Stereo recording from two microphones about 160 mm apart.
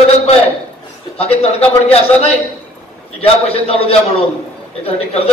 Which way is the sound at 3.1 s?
40° left (ahead or behind).